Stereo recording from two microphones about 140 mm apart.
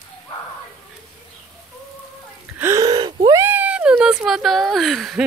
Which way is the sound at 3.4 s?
10° right (ahead or behind).